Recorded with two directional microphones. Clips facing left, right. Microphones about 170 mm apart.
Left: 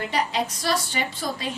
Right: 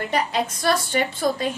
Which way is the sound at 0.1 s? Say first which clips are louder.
Right 3 dB; 50° right (ahead or behind).